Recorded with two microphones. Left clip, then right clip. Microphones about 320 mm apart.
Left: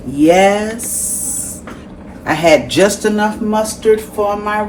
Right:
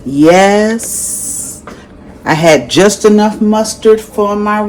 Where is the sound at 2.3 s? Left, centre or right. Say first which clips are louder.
Right 3 dB; right.